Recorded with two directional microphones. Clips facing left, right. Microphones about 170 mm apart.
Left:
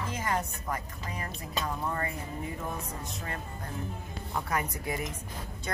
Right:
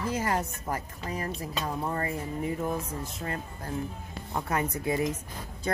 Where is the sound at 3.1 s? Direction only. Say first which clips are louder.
Right 3 dB; 35° right (ahead or behind).